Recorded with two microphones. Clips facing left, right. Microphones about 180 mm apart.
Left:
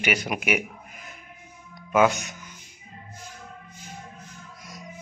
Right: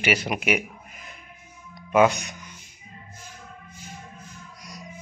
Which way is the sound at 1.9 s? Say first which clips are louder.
Right 2 dB; centre (ahead or behind).